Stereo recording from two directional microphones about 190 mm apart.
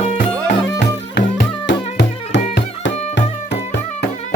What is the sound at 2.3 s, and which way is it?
Music, 65° left (ahead or behind).